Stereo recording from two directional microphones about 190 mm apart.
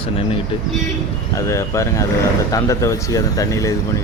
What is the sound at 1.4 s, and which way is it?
Speech, 15° left (ahead or behind).